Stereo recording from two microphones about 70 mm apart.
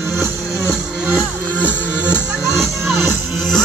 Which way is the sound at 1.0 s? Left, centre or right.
Centre.